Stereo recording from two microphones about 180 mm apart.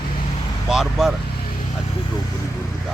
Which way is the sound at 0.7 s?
5° right (ahead or behind).